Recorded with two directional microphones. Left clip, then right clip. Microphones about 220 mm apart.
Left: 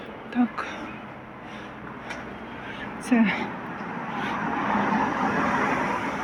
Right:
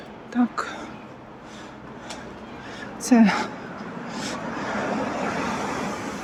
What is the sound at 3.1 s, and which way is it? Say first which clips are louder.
Speech: right 4 dB; 30° right (ahead or behind).